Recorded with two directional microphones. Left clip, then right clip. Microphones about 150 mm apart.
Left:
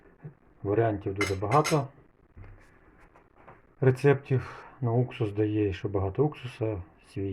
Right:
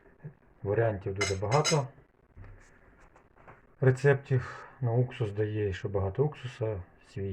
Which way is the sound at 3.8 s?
25° left (ahead or behind).